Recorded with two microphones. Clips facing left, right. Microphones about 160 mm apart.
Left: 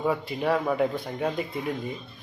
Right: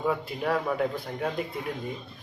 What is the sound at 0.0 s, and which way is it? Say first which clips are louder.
Speech: left 2 dB; centre (ahead or behind).